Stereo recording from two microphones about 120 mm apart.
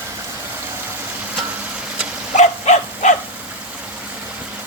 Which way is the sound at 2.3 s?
85° left.